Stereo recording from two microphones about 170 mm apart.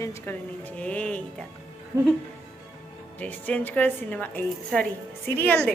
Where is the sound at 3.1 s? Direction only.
10° left (ahead or behind).